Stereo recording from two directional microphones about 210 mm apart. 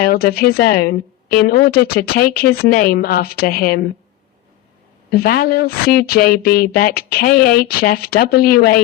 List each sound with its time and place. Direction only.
0.0 s speech: 45° left (ahead or behind)
5.1 s speech: 45° left (ahead or behind)